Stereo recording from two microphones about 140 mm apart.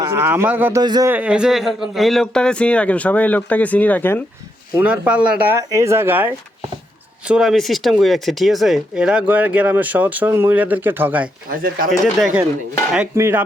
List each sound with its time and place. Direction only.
0.0 s speech: 20° right (ahead or behind)
0.8 s a man's voice: 30° right (ahead or behind)
1.1 s speech: 10° right (ahead or behind); by 4.2 s 15° left (ahead or behind)
4.8 s speech: 10° right (ahead or behind)
5.5 s speech: 20° right (ahead or behind)
7.3 s speech: 5° right (ahead or behind)
11.5 s speech: 90° right
11.9 s speech: centre (ahead or behind)
13.1 s speech: 20° right (ahead or behind)